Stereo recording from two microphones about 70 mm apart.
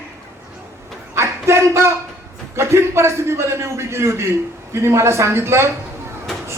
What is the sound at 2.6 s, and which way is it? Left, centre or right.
Speech, right.